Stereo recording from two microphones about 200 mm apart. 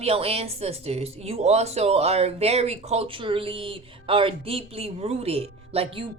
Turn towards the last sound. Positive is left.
turn(degrees=-30)  # may be behind; listen again after turning